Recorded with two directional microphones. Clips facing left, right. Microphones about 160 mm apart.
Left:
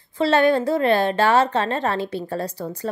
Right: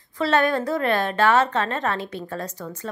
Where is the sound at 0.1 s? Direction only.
30° left (ahead or behind).